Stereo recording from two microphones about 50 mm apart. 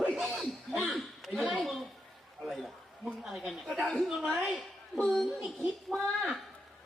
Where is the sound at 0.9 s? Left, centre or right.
Centre.